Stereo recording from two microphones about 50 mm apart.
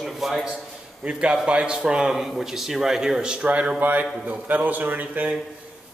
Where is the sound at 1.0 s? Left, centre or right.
Centre.